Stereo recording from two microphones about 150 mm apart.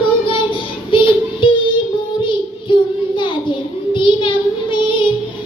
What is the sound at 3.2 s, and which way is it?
Child singing, 35° left (ahead or behind).